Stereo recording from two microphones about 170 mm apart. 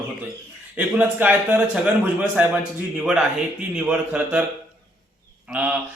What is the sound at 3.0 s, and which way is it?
A man's voice, 5° right (ahead or behind).